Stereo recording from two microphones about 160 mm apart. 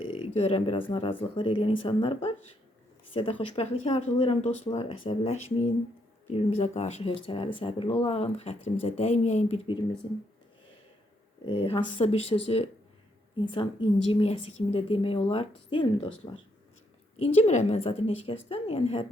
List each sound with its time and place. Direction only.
0.2 s speech: 40° left (ahead or behind)
10.0 s speech: 35° left (ahead or behind)
11.4 s speech: 35° left (ahead or behind)
17.2 s speech: 40° left (ahead or behind)